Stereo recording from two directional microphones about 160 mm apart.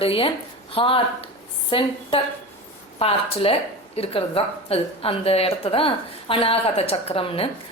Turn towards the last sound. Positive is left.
turn(degrees=35)  # may be behind; listen again after turning